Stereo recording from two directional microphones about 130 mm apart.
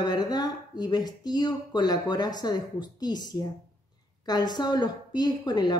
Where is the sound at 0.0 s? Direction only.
30° left (ahead or behind).